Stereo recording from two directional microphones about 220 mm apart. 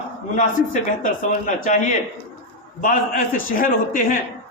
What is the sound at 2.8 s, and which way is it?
A man's voice, 40° left (ahead or behind).